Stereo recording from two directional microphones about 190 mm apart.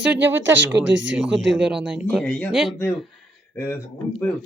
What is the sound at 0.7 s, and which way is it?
Speech, 70° right (ahead or behind).